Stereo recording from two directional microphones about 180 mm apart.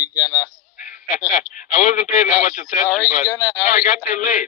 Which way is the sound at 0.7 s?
45° left (ahead or behind).